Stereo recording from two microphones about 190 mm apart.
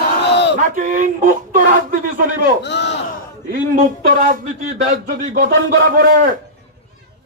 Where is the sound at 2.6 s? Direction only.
65° left (ahead or behind).